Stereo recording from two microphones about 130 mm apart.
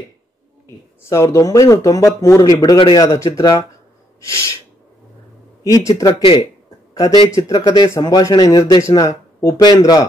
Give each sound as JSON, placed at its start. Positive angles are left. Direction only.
{"t": 1.0, "sound": "speech", "side_deg": 25}
{"t": 5.6, "sound": "speech", "side_deg": 25}